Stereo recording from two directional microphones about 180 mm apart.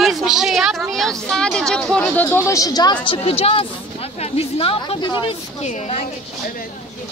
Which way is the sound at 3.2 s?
35° left (ahead or behind).